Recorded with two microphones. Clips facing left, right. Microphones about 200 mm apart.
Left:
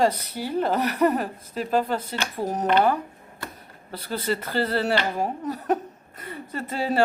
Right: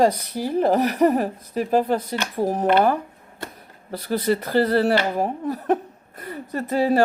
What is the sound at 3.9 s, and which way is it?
Speech, 40° right (ahead or behind).